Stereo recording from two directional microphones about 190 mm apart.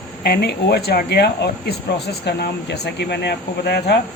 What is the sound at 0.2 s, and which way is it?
Speech, 60° left (ahead or behind).